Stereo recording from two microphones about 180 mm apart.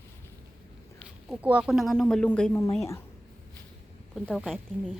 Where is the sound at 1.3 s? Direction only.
5° right (ahead or behind); by 2.6 s 10° left (ahead or behind).